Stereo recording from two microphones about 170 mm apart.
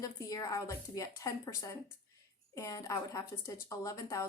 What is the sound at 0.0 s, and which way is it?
A woman's voice, 20° left (ahead or behind).